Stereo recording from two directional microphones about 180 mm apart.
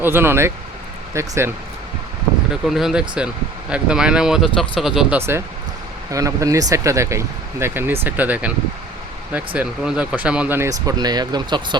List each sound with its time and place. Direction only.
0.0 s speech: 10° right (ahead or behind)
2.6 s speech: centre (ahead or behind)
6.1 s speech: 20° right (ahead or behind)